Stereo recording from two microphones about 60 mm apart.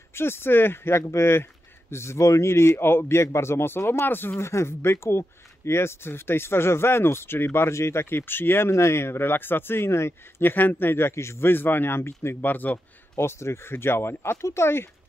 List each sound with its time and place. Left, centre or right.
0.1 s speech: left
4.4 s speech: left
10.5 s speech: left
12.4 s speech: left
13.2 s speech: left